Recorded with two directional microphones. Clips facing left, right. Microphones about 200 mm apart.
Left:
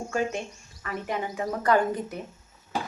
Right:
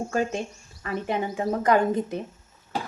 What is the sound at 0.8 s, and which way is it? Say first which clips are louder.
A woman's voice: right 4 dB; 30° right (ahead or behind).